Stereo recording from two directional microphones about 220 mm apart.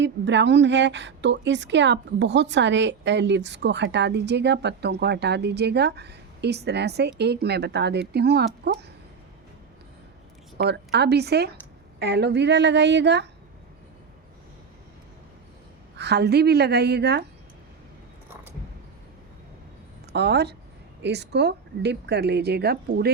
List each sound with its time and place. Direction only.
0.0 s a woman's voice: 55° right (ahead or behind)
10.6 s a woman's voice: 50° right (ahead or behind)
16.0 s a woman's voice: 50° right (ahead or behind)
20.1 s a woman's voice: 50° right (ahead or behind)